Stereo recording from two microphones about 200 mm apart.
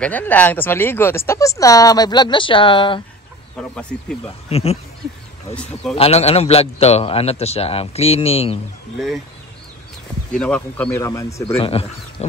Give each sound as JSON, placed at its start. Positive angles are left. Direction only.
{"t": 0.0, "sound": "speech", "side_deg": 10}
{"t": 3.5, "sound": "speech", "side_deg": 5}
{"t": 4.5, "sound": "speech", "side_deg": 30}
{"t": 5.9, "sound": "a man's voice", "side_deg": 30}
{"t": 10.3, "sound": "speech", "side_deg": 5}
{"t": 11.5, "sound": "speech", "side_deg": 30}